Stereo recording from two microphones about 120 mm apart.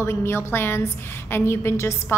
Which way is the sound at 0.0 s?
20° left (ahead or behind).